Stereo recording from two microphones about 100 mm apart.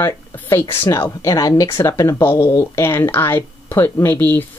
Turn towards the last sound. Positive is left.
turn(degrees=20)  # may be behind; listen again after turning